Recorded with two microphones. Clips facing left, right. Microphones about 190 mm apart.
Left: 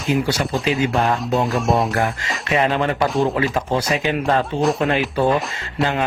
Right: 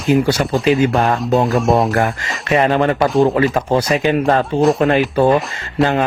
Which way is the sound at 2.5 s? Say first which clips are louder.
Right 5 dB; 50° right (ahead or behind).